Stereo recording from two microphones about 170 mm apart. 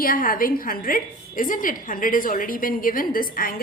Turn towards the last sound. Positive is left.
turn(degrees=55)  # may be behind; listen again after turning